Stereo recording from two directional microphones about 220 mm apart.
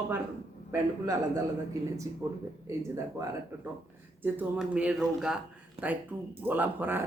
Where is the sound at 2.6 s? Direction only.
15° right (ahead or behind).